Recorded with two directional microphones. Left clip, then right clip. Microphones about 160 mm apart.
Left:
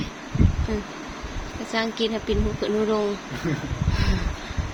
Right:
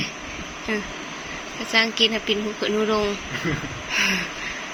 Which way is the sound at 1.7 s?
15° left (ahead or behind).